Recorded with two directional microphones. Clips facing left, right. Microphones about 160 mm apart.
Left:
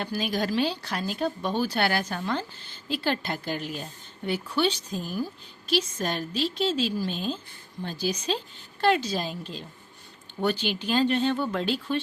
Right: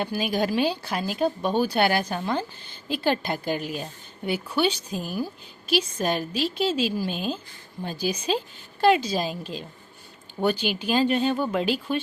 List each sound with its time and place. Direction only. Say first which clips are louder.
0.0 s a woman's voice: right 3 dB; 15° right (ahead or behind)